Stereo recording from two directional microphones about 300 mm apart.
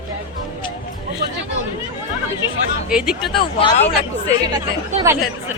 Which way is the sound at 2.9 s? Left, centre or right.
Centre.